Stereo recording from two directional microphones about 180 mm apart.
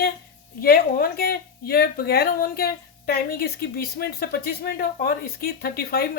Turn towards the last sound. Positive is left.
turn(degrees=55)  # may be behind; listen again after turning